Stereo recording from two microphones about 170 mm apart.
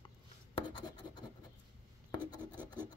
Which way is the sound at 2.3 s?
25° left (ahead or behind).